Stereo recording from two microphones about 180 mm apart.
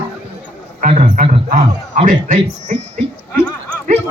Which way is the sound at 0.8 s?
45° right (ahead or behind).